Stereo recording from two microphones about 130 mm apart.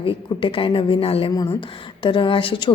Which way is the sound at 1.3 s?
30° left (ahead or behind).